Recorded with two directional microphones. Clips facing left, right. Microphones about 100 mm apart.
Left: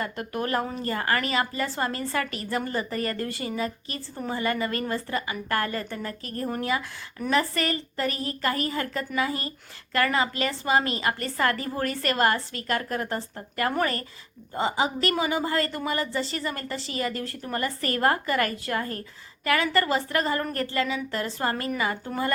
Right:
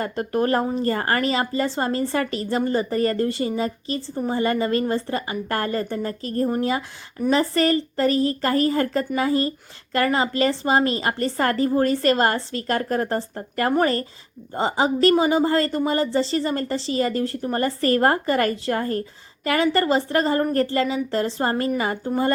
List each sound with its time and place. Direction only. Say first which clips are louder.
0.0 s a woman's voice: right 7 dB; 35° right (ahead or behind)
0.9 s a woman's voice: right 5 dB; 35° right (ahead or behind)